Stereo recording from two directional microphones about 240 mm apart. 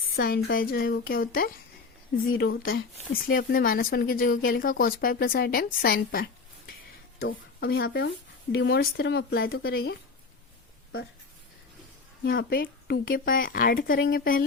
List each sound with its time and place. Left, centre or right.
0.2 s speech: left
2.3 s speech: left
3.1 s speech: left
12.2 s speech: left